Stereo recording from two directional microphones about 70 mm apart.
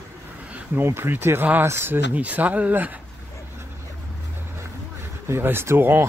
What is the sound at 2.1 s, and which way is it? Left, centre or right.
Speech, right.